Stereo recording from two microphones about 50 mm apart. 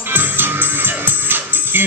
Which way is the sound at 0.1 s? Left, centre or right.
Right.